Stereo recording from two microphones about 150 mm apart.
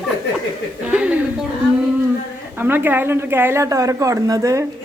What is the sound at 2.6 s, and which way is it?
Speech, 10° right (ahead or behind).